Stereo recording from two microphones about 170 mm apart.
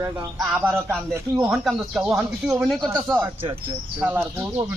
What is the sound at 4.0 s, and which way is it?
Speech, 10° right (ahead or behind).